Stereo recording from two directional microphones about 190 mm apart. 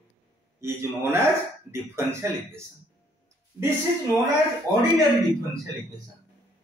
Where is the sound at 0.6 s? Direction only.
15° right (ahead or behind).